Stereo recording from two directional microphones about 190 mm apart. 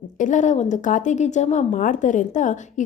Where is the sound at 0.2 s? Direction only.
40° left (ahead or behind).